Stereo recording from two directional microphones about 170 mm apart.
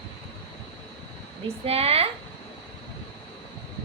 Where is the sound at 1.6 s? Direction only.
35° right (ahead or behind).